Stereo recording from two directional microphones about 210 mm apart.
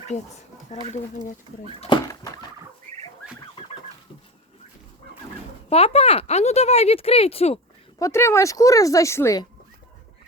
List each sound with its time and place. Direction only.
0.1 s speech: 35° left (ahead or behind)
1.9 s a sound: 20° left (ahead or behind)
5.6 s speech: 30° left (ahead or behind)
7.9 s speech: 15° left (ahead or behind)